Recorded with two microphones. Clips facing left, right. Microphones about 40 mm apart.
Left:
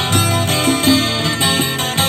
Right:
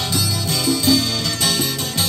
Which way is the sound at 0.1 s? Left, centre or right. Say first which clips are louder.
Left 6 dB; left.